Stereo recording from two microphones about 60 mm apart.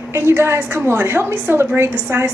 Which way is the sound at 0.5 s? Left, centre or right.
Right.